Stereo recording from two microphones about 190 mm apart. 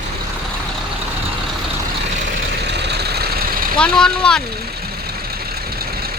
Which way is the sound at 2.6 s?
60° right (ahead or behind).